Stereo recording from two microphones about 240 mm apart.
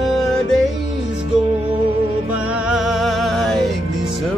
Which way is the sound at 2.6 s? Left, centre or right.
Centre.